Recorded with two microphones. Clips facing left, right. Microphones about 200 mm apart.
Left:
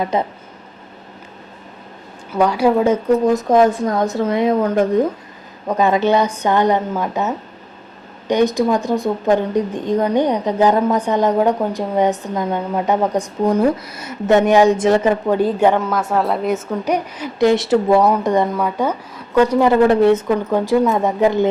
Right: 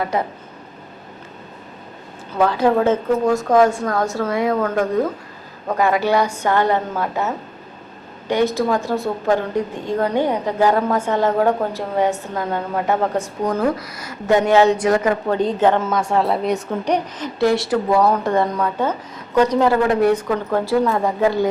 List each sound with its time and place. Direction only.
0.1 s a woman's voice: 20° left (ahead or behind)
2.3 s a woman's voice: 10° left (ahead or behind)
15.3 s a woman's voice: 10° left (ahead or behind)
17.4 s a woman's voice: 20° left (ahead or behind)
19.9 s a woman's voice: 25° left (ahead or behind)